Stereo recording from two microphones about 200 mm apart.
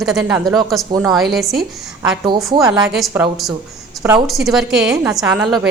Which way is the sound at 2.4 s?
Centre (ahead or behind).